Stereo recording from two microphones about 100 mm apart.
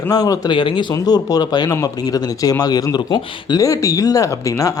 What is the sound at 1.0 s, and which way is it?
Speech, 40° left (ahead or behind).